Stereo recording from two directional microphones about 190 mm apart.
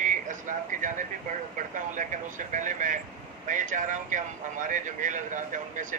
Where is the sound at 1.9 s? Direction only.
45° right (ahead or behind).